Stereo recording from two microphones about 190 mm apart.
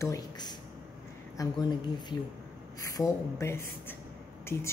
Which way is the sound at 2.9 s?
15° left (ahead or behind).